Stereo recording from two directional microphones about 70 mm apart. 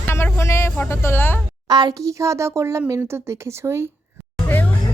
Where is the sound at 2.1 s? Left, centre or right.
Right.